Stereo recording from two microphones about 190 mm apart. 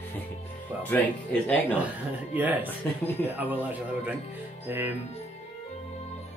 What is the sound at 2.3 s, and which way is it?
Speech, 10° right (ahead or behind).